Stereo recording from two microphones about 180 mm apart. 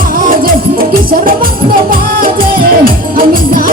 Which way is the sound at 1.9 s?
55° right (ahead or behind).